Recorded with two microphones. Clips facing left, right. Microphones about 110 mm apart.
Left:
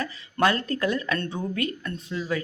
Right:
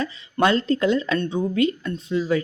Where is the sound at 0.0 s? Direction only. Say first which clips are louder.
Right 3 dB; 25° right (ahead or behind).